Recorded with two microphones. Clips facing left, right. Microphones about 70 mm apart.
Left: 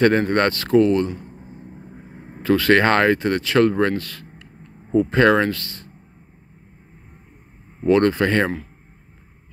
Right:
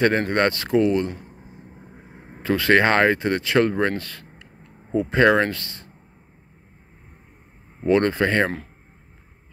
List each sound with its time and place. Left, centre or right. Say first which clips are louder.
0.0 s speech: left 3 dB; centre
1.1 s a sound: left 4 dB; centre
2.4 s speech: left 2 dB; right
3.9 s a sound: left 3 dB; right
4.9 s speech: left 2 dB; centre
7.8 s speech: left 2 dB; right